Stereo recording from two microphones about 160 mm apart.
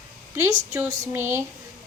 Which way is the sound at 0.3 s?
20° right (ahead or behind).